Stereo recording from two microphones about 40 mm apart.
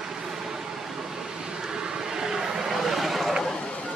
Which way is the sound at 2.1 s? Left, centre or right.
Centre.